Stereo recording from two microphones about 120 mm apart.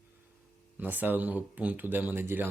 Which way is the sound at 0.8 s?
15° right (ahead or behind).